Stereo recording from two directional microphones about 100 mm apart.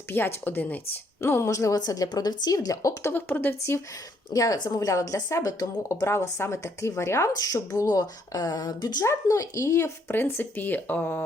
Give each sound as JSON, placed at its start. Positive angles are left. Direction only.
{"t": 0.1, "sound": "a woman's voice", "side_deg": 20}
{"t": 3.1, "sound": "speech", "side_deg": 20}
{"t": 4.3, "sound": "a woman's voice", "side_deg": 40}